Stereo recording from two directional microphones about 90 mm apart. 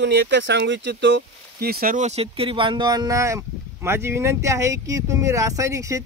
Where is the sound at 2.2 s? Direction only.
80° right.